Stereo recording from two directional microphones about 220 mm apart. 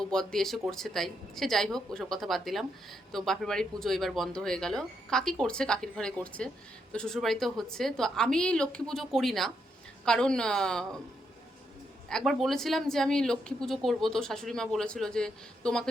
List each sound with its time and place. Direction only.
0.0 s speech: 5° left (ahead or behind)
12.0 s speech: centre (ahead or behind)